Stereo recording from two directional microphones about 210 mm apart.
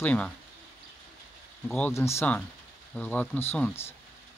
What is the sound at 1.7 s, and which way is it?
Speech, 10° left (ahead or behind).